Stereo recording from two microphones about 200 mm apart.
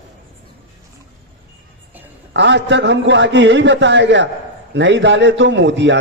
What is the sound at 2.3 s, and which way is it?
A man's voice, 60° right (ahead or behind).